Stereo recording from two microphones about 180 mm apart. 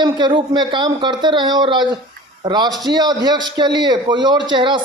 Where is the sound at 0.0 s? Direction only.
25° right (ahead or behind).